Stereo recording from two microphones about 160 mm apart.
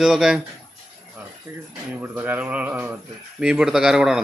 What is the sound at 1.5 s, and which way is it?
A man's voice, 15° right (ahead or behind).